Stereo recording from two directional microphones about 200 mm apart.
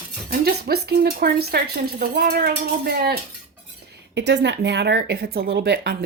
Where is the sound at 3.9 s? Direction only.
60° right (ahead or behind).